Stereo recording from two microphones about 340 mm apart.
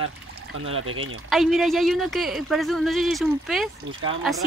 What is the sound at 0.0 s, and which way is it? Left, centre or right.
Speech, right.